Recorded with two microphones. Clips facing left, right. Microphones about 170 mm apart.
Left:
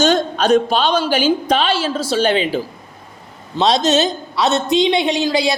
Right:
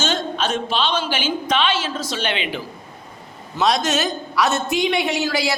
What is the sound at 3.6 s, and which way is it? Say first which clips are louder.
A man's voice: left 5 dB; 20° left (ahead or behind).